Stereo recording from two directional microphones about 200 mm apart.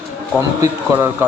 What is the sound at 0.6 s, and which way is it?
Speech, 15° right (ahead or behind).